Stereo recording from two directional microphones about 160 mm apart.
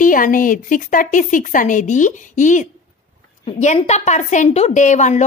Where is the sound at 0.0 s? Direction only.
60° left (ahead or behind).